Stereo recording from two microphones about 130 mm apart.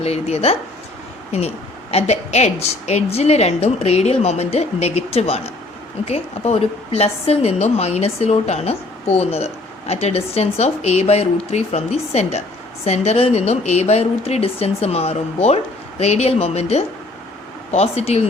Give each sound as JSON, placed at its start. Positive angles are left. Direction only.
{"t": 0.0, "sound": "a woman's voice", "side_deg": 55}